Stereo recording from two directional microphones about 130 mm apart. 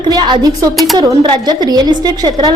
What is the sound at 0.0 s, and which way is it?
A woman's voice, 35° right (ahead or behind).